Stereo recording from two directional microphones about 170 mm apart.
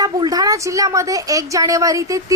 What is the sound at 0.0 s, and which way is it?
A woman's voice, 20° right (ahead or behind).